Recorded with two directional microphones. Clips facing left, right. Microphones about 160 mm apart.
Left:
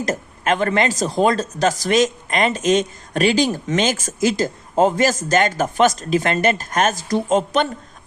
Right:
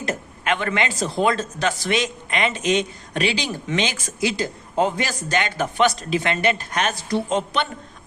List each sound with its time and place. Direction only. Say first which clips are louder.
0.0 s speech: left 4 dB; 40° left (ahead or behind)